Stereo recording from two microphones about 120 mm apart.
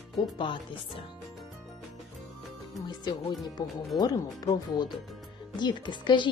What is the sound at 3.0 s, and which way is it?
A woman's voice, 35° left (ahead or behind).